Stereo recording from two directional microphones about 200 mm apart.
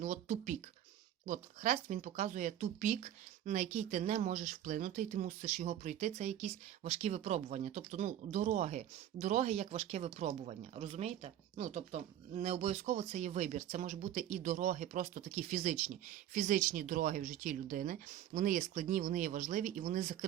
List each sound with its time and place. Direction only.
0.0 s speech: 40° right (ahead or behind)